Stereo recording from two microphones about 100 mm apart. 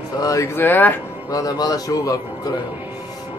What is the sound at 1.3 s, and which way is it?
Speech, 40° left (ahead or behind).